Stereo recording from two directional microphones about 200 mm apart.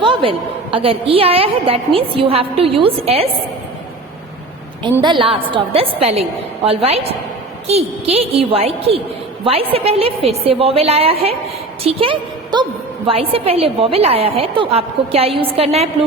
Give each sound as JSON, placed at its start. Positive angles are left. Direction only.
{"t": 0.0, "sound": "a woman's voice", "side_deg": -25}
{"t": 5.0, "sound": "a woman's voice", "side_deg": -25}